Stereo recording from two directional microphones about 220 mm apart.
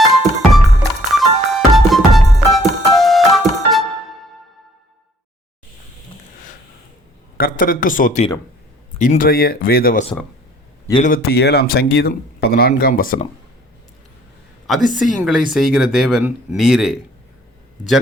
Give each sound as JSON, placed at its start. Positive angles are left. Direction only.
{"t": 0.2, "sound": "music", "side_deg": 0}
{"t": 7.3, "sound": "a man's voice", "side_deg": 40}
{"t": 14.9, "sound": "speech", "side_deg": 0}